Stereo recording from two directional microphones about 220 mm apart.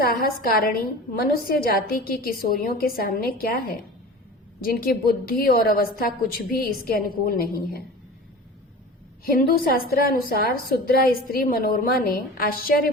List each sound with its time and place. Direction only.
0.0 s a woman's voice: 45° left (ahead or behind)
9.2 s a woman's voice: 40° left (ahead or behind)